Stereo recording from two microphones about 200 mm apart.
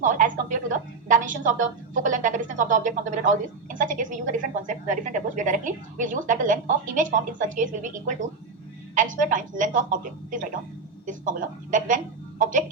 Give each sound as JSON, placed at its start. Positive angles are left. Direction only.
{"t": 0.0, "sound": "a woman's voice", "side_deg": -40}